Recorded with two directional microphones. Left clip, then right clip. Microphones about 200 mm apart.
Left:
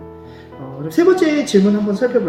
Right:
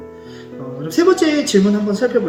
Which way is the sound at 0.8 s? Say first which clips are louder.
Even; 20° right (ahead or behind).